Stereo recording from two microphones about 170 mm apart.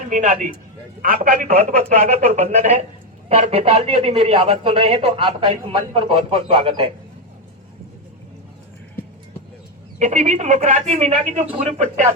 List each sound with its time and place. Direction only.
0.1 s speech: 50° right (ahead or behind); by 6.9 s 30° right (ahead or behind)
10.0 s speech: 45° right (ahead or behind)